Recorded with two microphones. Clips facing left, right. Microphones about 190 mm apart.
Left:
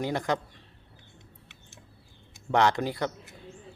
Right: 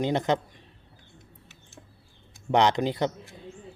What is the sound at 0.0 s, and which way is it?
Speech, 20° right (ahead or behind).